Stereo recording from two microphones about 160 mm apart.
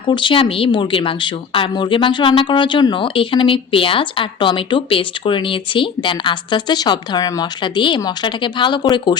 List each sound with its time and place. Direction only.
0.1 s speech: 30° left (ahead or behind)